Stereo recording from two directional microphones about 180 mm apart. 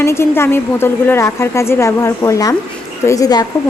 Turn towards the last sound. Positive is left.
turn(degrees=20)  # may be behind; listen again after turning